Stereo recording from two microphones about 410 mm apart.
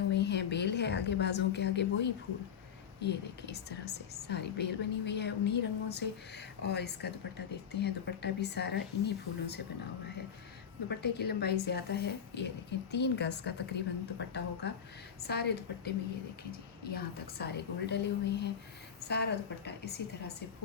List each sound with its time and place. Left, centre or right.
0.1 s a woman's voice: left
10.8 s speech: left
17.3 s speech: left